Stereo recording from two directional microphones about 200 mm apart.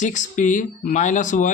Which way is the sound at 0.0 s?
40° left (ahead or behind).